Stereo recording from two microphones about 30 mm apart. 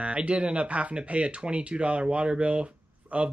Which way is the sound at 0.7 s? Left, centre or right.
Right.